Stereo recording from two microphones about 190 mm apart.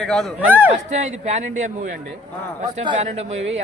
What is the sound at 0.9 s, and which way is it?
Speech, 40° right (ahead or behind).